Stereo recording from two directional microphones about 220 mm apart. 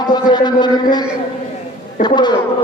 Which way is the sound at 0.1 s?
20° left (ahead or behind).